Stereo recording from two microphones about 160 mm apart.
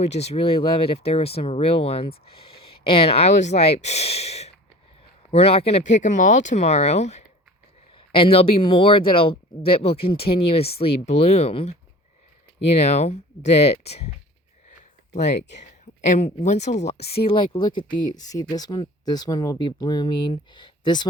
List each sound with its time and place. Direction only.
0.0 s speech: 40° left (ahead or behind)
12.8 s speech: 45° left (ahead or behind)
14.7 s a sound: 45° left (ahead or behind)
15.4 s speech: 90° left
15.6 s speech: 50° left (ahead or behind); by 21.1 s 30° left (ahead or behind)